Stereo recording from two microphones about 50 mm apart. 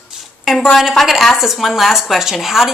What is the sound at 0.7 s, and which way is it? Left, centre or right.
A woman's voice, centre.